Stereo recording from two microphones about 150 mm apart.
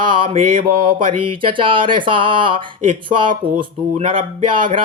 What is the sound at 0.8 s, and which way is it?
Speech, 35° right (ahead or behind).